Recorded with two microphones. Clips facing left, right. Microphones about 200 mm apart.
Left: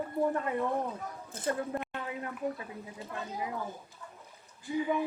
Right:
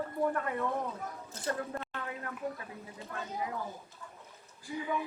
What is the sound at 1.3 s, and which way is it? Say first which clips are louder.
Speech: left 5 dB; 55° left (ahead or behind).